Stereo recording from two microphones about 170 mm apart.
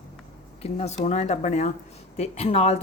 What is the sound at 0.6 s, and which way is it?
A woman's voice, 40° left (ahead or behind).